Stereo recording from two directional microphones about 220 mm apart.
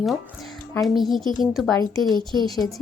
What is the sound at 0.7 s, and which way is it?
A woman's voice, centre (ahead or behind).